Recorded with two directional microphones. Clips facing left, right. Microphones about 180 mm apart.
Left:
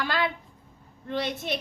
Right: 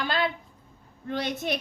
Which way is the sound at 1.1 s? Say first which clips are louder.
Even; 45° right (ahead or behind).